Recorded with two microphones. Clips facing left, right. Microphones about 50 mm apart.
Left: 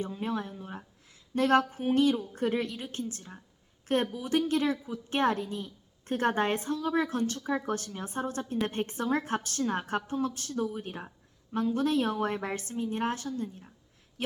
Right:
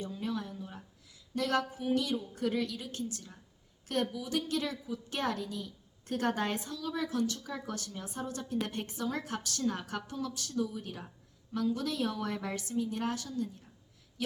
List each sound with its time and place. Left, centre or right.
0.0 s a woman's voice: left
14.2 s gasp: left